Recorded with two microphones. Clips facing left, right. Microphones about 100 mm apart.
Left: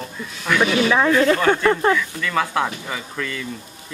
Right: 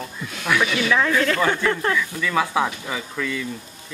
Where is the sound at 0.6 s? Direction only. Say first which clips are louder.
Left 6 dB; 40° left (ahead or behind).